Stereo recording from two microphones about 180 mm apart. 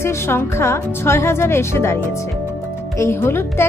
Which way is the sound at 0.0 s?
15° left (ahead or behind).